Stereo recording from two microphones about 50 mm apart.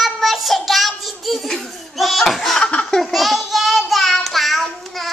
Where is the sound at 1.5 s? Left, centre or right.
Centre.